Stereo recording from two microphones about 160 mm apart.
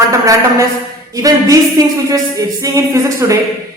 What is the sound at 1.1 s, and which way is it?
A man's voice, 20° right (ahead or behind).